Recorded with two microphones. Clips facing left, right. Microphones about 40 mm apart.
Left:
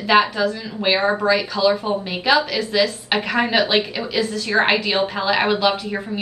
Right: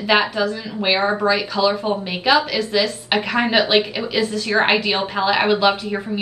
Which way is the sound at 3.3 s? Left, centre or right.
Centre.